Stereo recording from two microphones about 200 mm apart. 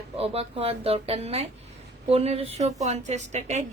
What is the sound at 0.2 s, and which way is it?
A woman's voice, 30° right (ahead or behind).